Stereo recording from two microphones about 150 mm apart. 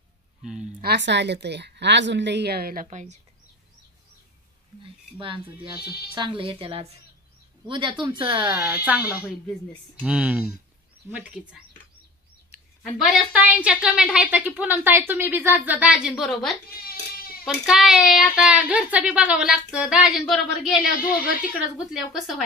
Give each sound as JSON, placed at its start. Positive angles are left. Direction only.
{"t": 0.4, "sound": "speech", "side_deg": -5}
{"t": 0.7, "sound": "speech", "side_deg": -90}
{"t": 2.4, "sound": "a woman's voice", "side_deg": -90}
{"t": 5.2, "sound": "speech", "side_deg": -35}
{"t": 5.8, "sound": "speech", "side_deg": 90}
{"t": 6.1, "sound": "speech", "side_deg": -35}
{"t": 8.5, "sound": "a woman's voice", "side_deg": -10}
{"t": 10.0, "sound": "a woman's voice", "side_deg": -10}
{"t": 13.0, "sound": "a woman's voice", "side_deg": -10}
{"t": 16.6, "sound": "a sound", "side_deg": 90}
{"t": 17.5, "sound": "a woman's voice", "side_deg": -5}
{"t": 20.7, "sound": "speech", "side_deg": 65}
{"t": 21.1, "sound": "a woman's voice", "side_deg": -5}